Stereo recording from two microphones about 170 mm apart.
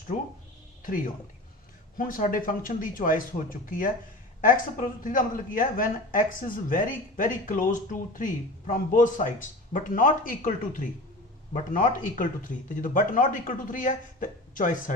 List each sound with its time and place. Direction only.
0.8 s a woman's voice: 55° left (ahead or behind)